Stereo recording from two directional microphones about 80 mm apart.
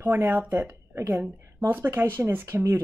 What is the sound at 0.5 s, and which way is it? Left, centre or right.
Speech, right.